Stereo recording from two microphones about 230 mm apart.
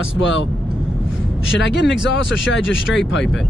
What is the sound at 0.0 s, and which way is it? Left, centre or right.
Speech, left.